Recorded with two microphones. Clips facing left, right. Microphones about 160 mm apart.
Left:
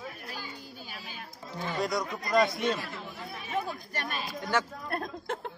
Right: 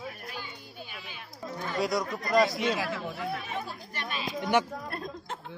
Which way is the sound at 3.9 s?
45° left (ahead or behind).